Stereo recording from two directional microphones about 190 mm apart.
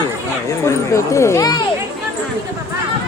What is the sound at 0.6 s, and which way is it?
Speech, 15° left (ahead or behind).